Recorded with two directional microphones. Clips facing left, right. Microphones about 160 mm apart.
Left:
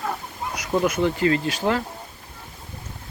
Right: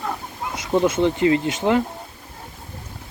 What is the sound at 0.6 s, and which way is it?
Speech, 25° right (ahead or behind).